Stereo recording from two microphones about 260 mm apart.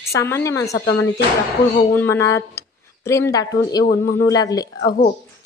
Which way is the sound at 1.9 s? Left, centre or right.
Centre.